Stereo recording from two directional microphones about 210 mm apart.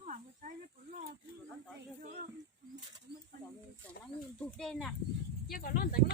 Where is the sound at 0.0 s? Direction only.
35° right (ahead or behind).